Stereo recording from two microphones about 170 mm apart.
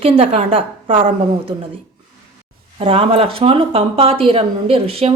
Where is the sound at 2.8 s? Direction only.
35° right (ahead or behind).